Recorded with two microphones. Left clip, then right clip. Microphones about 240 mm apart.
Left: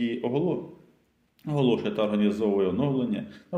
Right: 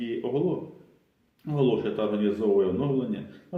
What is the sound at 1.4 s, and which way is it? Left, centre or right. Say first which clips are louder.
Speech: even; left.